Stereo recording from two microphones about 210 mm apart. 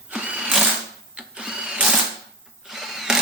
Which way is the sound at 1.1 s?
5° right (ahead or behind).